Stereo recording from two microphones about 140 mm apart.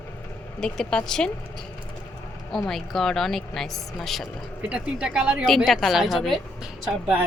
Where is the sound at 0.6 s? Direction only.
5° left (ahead or behind).